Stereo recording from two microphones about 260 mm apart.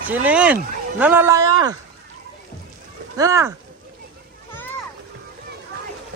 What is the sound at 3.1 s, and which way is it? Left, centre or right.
Speech, centre.